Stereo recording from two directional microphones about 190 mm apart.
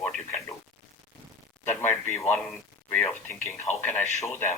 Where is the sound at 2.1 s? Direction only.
15° left (ahead or behind).